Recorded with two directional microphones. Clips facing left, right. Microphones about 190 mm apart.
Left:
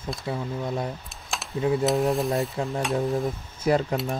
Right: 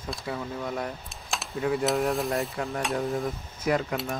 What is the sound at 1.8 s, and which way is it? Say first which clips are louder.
Speech: left 2 dB; centre (ahead or behind).